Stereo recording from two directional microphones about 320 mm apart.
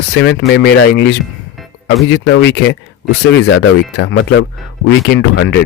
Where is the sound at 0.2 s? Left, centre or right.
Left.